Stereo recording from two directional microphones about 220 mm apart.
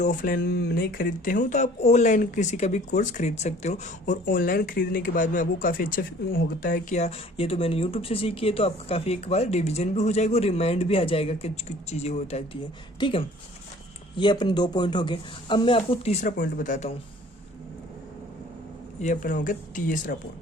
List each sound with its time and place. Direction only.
0.0 s speech: 35° left (ahead or behind)
19.0 s speech: 35° left (ahead or behind)